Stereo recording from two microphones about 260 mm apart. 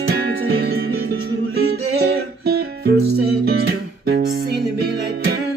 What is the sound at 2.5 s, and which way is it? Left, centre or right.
Music, right.